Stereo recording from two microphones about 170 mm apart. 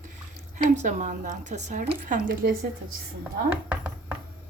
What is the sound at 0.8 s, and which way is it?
A woman's voice, 45° right (ahead or behind).